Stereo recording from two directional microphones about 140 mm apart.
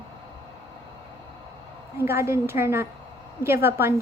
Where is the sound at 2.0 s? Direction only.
20° right (ahead or behind).